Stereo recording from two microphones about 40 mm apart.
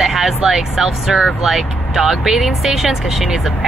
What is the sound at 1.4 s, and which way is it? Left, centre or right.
Speech, centre.